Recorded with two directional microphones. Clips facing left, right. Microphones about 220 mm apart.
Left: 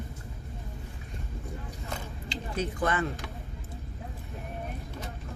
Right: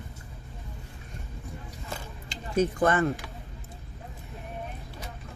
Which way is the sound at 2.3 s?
45° right (ahead or behind).